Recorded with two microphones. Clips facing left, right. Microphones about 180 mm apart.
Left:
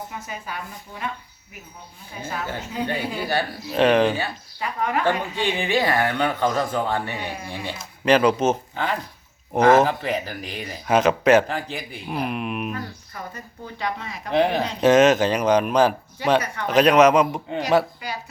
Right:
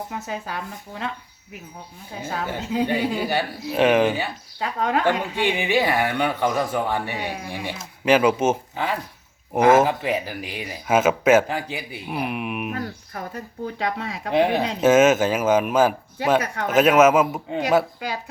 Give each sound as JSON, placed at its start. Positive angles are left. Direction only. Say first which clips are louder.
{"t": 2.5, "sound": "speech", "louder": "right 6 dB", "side_deg": -10}
{"t": 4.6, "sound": "speech", "louder": "right 2 dB", "side_deg": -90}
{"t": 5.0, "sound": "speech", "louder": "right 1 dB", "side_deg": -15}
{"t": 12.7, "sound": "speech", "louder": "right 3 dB", "side_deg": -65}
{"t": 14.3, "sound": "speech", "louder": "right 1 dB", "side_deg": -10}